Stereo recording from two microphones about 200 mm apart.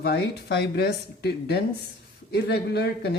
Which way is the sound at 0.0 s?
55° left (ahead or behind).